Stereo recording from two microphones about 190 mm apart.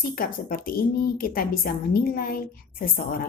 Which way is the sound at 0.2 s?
50° left (ahead or behind).